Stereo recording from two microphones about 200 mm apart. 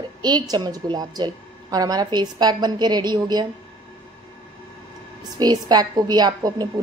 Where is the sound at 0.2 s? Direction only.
20° right (ahead or behind).